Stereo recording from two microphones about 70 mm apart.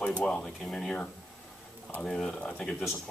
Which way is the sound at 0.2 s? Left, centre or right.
Centre.